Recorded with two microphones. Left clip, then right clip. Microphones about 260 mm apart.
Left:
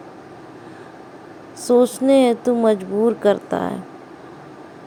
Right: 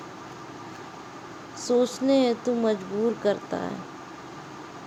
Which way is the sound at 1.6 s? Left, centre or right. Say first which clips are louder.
Left 8 dB; centre.